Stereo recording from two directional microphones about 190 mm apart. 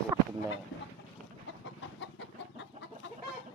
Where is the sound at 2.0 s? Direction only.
70° left (ahead or behind).